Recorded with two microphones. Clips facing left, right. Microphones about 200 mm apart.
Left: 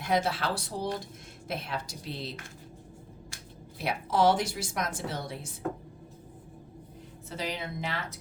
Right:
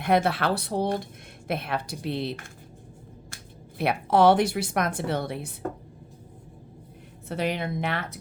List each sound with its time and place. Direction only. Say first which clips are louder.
0.0 s a woman's voice: right 5 dB; 60° right (ahead or behind)
3.8 s a woman's voice: right 6 dB; 60° right (ahead or behind)
7.3 s a woman's voice: right 7 dB; 60° right (ahead or behind)